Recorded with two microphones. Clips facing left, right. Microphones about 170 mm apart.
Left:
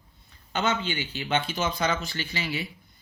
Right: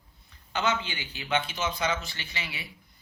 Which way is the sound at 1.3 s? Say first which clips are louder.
Left 2 dB; 30° left (ahead or behind).